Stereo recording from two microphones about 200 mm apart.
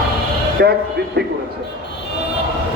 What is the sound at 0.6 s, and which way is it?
Speech, 55° right (ahead or behind).